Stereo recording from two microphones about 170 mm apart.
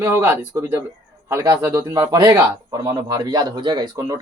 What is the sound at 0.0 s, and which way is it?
Speech, 15° right (ahead or behind).